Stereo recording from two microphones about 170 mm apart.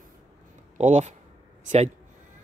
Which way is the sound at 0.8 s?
40° right (ahead or behind).